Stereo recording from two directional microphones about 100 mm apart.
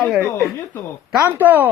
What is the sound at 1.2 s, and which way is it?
Speech, 20° right (ahead or behind).